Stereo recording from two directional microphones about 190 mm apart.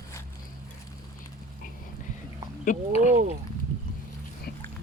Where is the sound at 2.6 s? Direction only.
40° left (ahead or behind).